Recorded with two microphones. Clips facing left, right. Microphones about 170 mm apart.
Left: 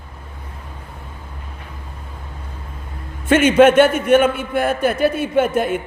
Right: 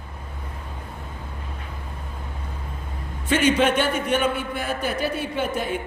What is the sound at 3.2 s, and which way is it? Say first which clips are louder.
A man's voice: left 8 dB; 50° left (ahead or behind).